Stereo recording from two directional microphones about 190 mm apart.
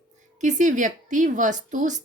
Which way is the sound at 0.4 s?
40° right (ahead or behind).